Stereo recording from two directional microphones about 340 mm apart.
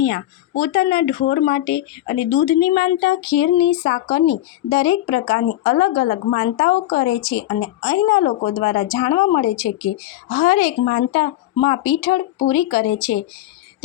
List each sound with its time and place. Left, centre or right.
0.0 s a woman's voice: left